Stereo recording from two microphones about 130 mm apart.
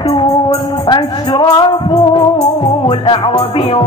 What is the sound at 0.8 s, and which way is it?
Music, 35° left (ahead or behind).